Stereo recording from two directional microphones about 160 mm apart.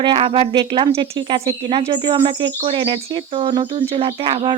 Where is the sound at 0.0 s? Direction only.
30° right (ahead or behind).